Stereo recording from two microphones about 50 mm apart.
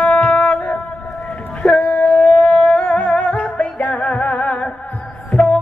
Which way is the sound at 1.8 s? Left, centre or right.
Left.